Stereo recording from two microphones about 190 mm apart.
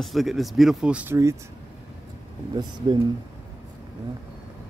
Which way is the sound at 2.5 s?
25° right (ahead or behind).